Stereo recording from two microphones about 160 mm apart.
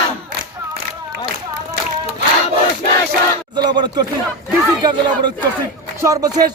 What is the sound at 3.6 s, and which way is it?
A man's voice, 25° right (ahead or behind).